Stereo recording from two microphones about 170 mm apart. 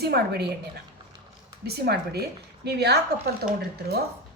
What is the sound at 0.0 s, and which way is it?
Speech, 70° right (ahead or behind).